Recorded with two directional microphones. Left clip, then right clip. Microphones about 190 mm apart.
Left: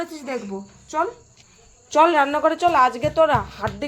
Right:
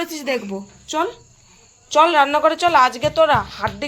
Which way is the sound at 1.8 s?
25° left (ahead or behind).